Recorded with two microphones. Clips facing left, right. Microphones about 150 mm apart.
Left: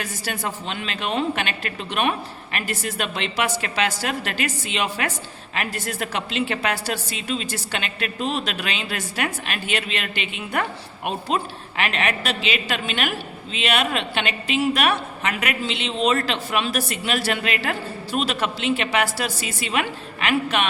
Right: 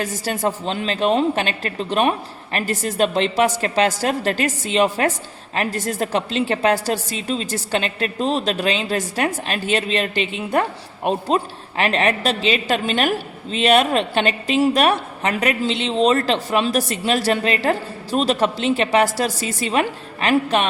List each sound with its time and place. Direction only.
0.0 s a woman's voice: 35° right (ahead or behind)